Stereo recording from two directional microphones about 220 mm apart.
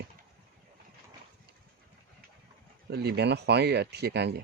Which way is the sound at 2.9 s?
45° right (ahead or behind).